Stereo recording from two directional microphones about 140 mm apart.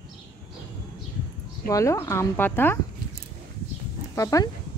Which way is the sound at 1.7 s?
20° left (ahead or behind).